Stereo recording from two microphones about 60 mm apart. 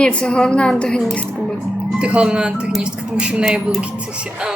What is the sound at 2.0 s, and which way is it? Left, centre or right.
Speech, centre.